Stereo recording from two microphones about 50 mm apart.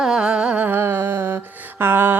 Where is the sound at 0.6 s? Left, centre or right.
Right.